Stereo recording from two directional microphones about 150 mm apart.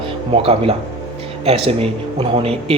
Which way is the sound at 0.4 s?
40° right (ahead or behind).